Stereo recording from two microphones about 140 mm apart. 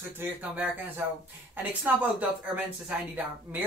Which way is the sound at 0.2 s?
10° right (ahead or behind).